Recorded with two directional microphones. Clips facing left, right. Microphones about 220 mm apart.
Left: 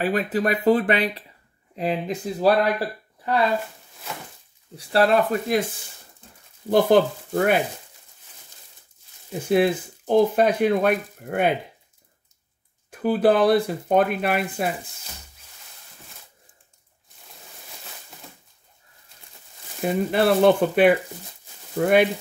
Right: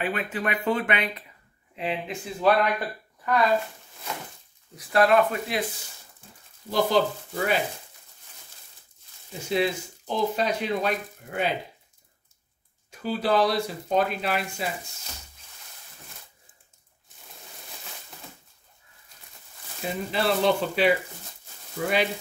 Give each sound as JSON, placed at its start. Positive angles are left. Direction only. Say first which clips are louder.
{"t": 0.0, "sound": "speech", "louder": "left 6 dB", "side_deg": 35}
{"t": 4.7, "sound": "speech", "louder": "left 1 dB", "side_deg": 35}
{"t": 6.7, "sound": "speech", "louder": "left 6 dB", "side_deg": 55}
{"t": 9.3, "sound": "speech", "louder": "left 6 dB", "side_deg": 55}
{"t": 12.9, "sound": "speech", "louder": "left 6 dB", "side_deg": 55}
{"t": 19.8, "sound": "speech", "louder": "left 7 dB", "side_deg": 55}